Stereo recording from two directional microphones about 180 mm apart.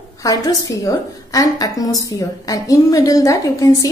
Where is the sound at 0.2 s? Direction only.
20° left (ahead or behind).